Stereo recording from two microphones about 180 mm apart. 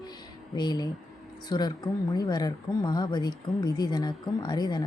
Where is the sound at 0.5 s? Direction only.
25° left (ahead or behind).